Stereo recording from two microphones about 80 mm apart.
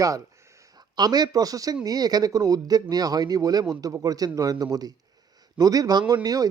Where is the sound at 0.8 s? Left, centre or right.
Right.